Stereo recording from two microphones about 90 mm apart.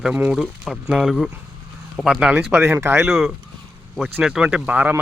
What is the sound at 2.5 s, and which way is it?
Speech, 25° right (ahead or behind).